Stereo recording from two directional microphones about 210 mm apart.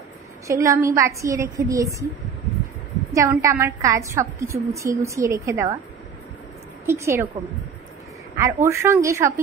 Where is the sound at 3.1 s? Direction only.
15° right (ahead or behind).